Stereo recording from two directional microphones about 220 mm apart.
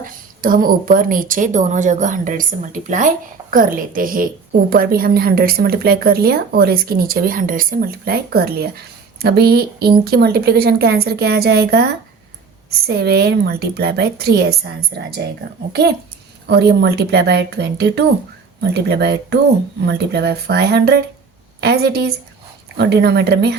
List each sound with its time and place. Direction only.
0.0 s a woman's voice: 40° right (ahead or behind)
16.5 s a woman's voice: 50° right (ahead or behind)